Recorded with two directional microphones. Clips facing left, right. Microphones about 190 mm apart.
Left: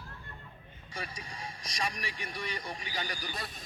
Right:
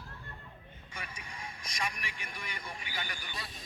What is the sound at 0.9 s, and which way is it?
Speech, 35° left (ahead or behind).